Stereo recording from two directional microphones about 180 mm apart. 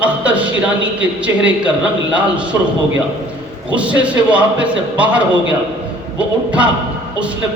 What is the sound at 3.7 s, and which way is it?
A man's voice, 5° right (ahead or behind).